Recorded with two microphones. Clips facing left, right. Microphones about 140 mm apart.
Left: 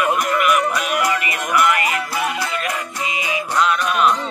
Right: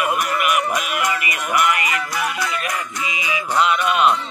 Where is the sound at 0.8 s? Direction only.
35° left (ahead or behind).